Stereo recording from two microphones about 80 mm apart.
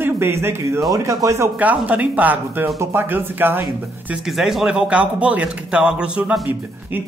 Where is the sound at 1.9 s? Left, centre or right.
Centre.